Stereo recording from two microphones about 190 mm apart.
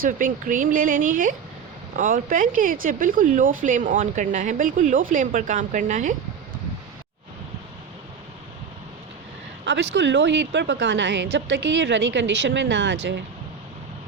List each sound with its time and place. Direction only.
0.0 s a woman's voice: 45° right (ahead or behind)
9.9 s a woman's voice: 70° right (ahead or behind)